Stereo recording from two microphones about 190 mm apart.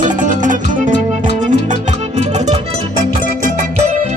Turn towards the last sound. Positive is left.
turn(degrees=-35)  # may be behind; listen again after turning